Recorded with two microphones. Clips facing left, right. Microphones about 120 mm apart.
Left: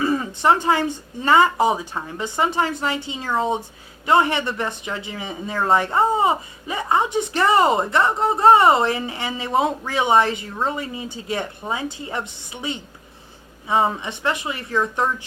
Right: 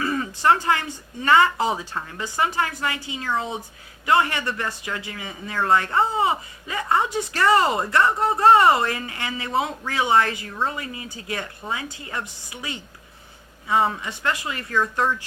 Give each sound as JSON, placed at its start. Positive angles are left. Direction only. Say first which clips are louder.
{"t": 0.0, "sound": "speech", "louder": "left 3 dB", "side_deg": 20}